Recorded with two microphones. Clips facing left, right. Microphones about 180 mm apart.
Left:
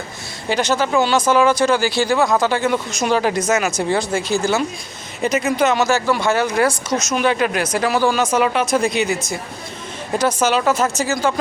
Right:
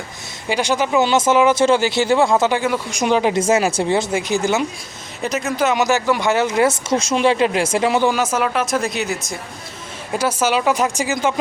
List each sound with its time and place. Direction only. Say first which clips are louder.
0.4 s speech: even; 10° right (ahead or behind)
3.0 s speech: right 3 dB; 15° right (ahead or behind)
5.2 s speech: left 2 dB; centre (ahead or behind)
5.7 s speech: even; 15° right (ahead or behind)
8.1 s speech: left 2 dB; 5° right (ahead or behind)